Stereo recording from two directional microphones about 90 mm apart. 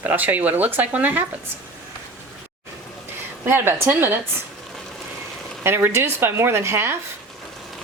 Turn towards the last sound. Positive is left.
turn(degrees=-25)  # may be behind; listen again after turning